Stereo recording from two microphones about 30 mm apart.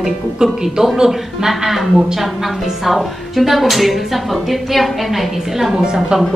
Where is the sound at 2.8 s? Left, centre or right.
Centre.